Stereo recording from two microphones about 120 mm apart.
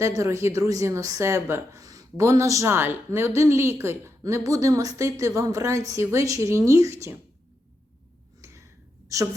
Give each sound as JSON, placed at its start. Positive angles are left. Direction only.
{"t": 0.0, "sound": "a woman's voice", "side_deg": -25}
{"t": 8.4, "sound": "a sound", "side_deg": -25}
{"t": 9.1, "sound": "a woman's voice", "side_deg": -25}